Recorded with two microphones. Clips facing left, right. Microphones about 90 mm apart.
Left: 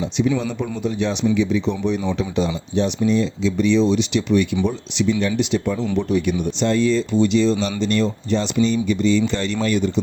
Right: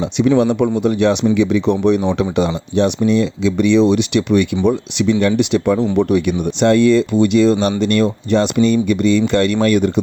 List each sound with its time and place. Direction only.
0.0 s speech: 70° right (ahead or behind)